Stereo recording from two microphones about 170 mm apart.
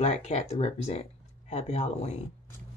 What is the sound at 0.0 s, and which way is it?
Speech, 40° left (ahead or behind).